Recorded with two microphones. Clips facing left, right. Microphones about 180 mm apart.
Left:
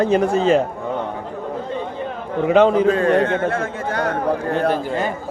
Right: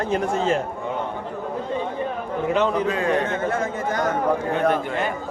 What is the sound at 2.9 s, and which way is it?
A man's voice, 50° left (ahead or behind).